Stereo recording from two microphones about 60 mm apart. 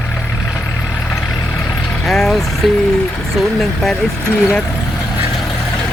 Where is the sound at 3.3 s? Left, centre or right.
Centre.